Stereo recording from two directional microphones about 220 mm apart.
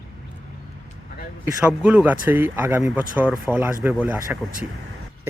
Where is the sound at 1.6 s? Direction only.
5° right (ahead or behind).